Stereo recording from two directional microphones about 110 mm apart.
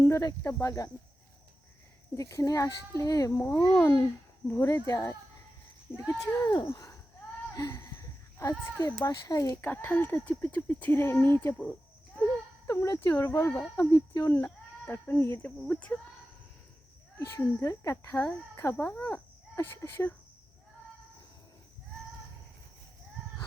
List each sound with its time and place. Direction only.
0.0 s speech: 30° left (ahead or behind)
2.1 s speech: 30° left (ahead or behind)
9.6 s speech: 15° left (ahead or behind)
12.6 s speech: 30° left (ahead or behind)
13.9 s speech: 35° left (ahead or behind)
14.3 s speech: 15° left (ahead or behind)
15.4 s speech: 10° left (ahead or behind)
17.2 s speech: 25° left (ahead or behind)